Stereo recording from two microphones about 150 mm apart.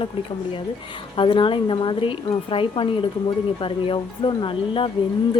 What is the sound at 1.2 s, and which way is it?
Speech, 35° left (ahead or behind).